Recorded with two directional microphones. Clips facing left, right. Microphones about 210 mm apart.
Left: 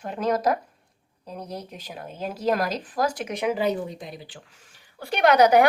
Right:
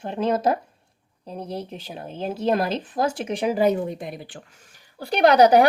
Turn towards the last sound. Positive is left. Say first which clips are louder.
# right 2 dB
turn(degrees=-35)  # may be behind; listen again after turning